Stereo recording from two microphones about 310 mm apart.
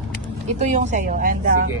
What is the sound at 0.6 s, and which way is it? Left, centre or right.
Speech, right.